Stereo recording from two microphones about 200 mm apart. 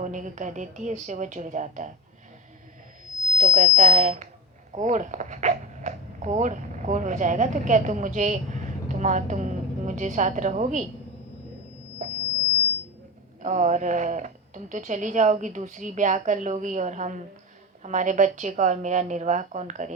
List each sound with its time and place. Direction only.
0.0 s a woman's voice: 40° right (ahead or behind)
3.3 s a woman's voice: 40° right (ahead or behind)
13.4 s a woman's voice: 40° right (ahead or behind)